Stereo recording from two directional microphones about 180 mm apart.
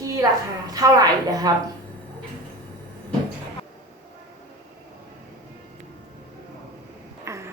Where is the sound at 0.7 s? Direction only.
20° right (ahead or behind).